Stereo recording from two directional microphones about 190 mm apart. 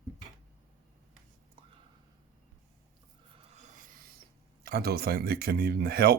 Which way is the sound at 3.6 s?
45° right (ahead or behind).